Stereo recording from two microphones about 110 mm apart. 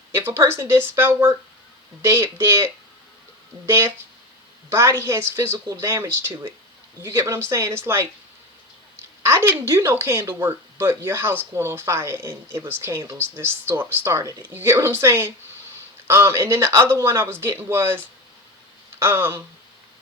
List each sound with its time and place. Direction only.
0.1 s speech: 20° right (ahead or behind)
9.2 s speech: 25° right (ahead or behind)